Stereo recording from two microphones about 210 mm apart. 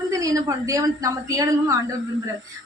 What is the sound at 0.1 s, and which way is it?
A woman's voice, 15° right (ahead or behind).